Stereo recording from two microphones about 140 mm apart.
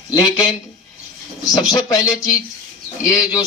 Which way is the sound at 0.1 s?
25° left (ahead or behind).